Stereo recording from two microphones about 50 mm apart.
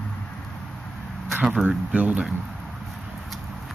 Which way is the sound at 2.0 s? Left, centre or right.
Right.